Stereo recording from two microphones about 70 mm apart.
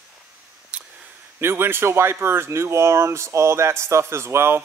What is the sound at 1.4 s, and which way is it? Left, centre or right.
Speech, right.